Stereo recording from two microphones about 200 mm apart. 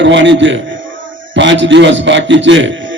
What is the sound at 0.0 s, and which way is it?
A man's voice, 65° right (ahead or behind).